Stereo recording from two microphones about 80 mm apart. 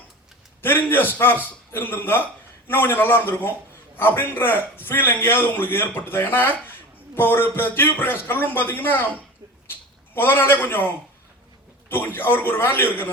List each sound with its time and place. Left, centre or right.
0.6 s a man's voice: left
10.2 s a man's voice: left
11.9 s a man's voice: left